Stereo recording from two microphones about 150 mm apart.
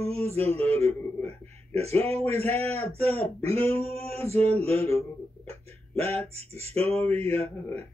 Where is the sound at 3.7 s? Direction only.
40° right (ahead or behind).